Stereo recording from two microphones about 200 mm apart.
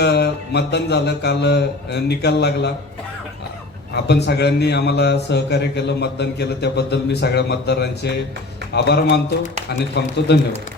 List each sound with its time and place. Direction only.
0.0 s a man's voice: 55° left (ahead or behind)
3.9 s a man's voice: 60° left (ahead or behind)